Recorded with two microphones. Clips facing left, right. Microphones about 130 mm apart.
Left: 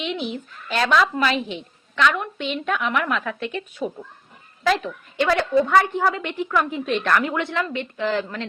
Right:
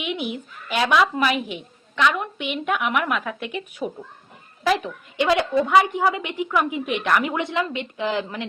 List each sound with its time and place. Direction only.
0.0 s a woman's voice: 15° right (ahead or behind)